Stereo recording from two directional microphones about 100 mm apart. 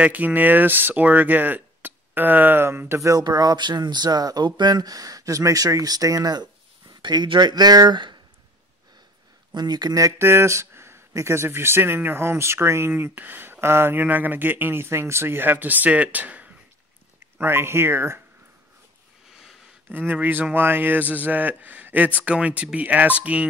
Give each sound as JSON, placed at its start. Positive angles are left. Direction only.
{"t": 0.0, "sound": "speech", "side_deg": -15}
{"t": 9.5, "sound": "speech", "side_deg": -45}
{"t": 19.9, "sound": "a man's voice", "side_deg": -20}